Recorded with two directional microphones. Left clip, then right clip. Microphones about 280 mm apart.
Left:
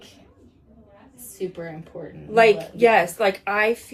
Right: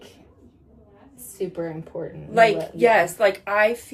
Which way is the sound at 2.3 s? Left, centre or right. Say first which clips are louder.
Left 1 dB; centre.